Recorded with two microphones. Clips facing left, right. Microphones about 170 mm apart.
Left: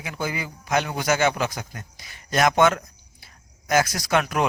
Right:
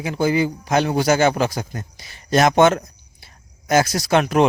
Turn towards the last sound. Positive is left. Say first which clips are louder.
# right 6 dB
turn(degrees=-30)  # may be behind; listen again after turning